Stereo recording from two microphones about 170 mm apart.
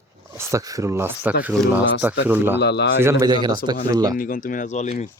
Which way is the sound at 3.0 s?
15° right (ahead or behind).